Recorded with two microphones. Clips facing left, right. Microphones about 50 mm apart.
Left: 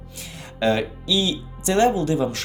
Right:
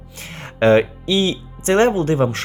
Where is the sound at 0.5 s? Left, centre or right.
Right.